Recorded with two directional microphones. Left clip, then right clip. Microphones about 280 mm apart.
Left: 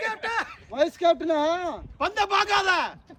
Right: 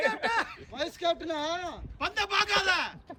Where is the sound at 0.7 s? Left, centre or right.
Centre.